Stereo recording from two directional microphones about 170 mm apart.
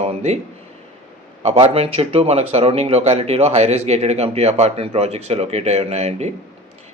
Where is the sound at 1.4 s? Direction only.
40° right (ahead or behind).